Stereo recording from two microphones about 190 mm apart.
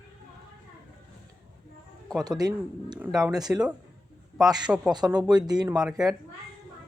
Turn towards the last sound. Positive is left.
turn(degrees=-5)  # may be behind; listen again after turning